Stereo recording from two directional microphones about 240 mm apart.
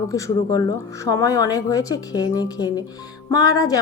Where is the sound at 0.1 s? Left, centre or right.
Centre.